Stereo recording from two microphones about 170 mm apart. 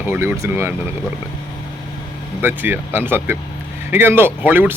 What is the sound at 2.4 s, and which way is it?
Speech, 10° right (ahead or behind).